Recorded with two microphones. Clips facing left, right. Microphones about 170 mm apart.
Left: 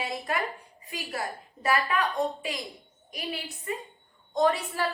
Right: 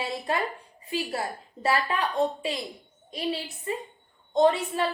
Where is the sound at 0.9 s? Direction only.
30° right (ahead or behind).